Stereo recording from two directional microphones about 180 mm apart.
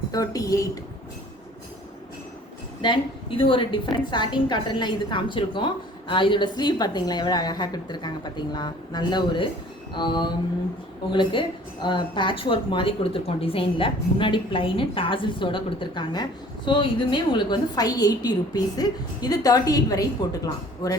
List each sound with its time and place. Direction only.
0.1 s a woman's voice: 20° left (ahead or behind)
2.8 s a woman's voice: 25° left (ahead or behind)